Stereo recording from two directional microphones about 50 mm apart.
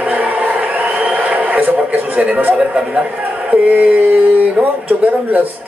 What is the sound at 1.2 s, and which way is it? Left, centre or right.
Television, right.